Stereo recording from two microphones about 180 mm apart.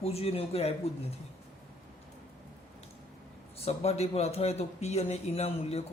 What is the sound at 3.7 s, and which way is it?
Speech, 35° left (ahead or behind).